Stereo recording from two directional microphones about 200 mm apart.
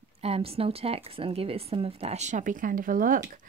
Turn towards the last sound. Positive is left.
turn(degrees=-45)  # may be behind; listen again after turning